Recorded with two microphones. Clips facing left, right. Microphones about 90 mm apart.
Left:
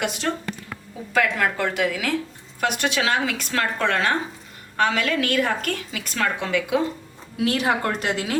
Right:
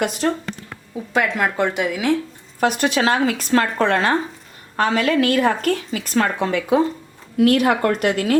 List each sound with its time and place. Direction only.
0.0 s a woman's voice: 40° right (ahead or behind)
1.1 s speech: 20° right (ahead or behind)
2.6 s a woman's voice: 35° right (ahead or behind)
7.3 s a woman's voice: 50° right (ahead or behind)